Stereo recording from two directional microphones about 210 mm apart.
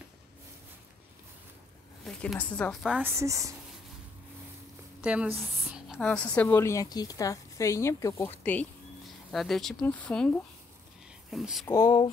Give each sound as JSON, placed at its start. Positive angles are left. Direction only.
{"t": 2.0, "sound": "a woman's voice", "side_deg": 5}
{"t": 5.0, "sound": "a woman's voice", "side_deg": -5}
{"t": 11.6, "sound": "a woman's voice", "side_deg": 15}